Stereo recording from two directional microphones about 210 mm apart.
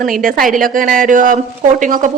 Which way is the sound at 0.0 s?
40° right (ahead or behind).